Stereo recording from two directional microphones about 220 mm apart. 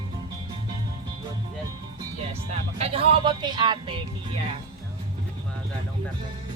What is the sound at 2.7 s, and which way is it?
Speech, 25° right (ahead or behind).